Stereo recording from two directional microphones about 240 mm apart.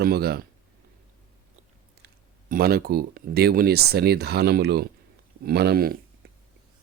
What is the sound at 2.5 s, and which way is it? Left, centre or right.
Speech, right.